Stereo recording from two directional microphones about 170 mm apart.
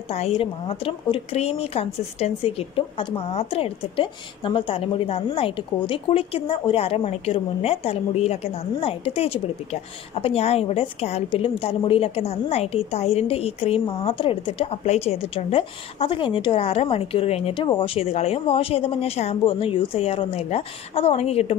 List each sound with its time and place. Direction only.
0.1 s speech: 35° left (ahead or behind)